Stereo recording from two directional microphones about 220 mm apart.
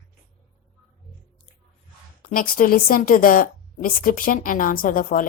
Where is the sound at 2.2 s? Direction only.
40° left (ahead or behind).